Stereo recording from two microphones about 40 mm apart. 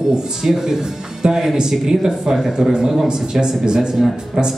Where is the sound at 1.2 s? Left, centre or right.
Centre.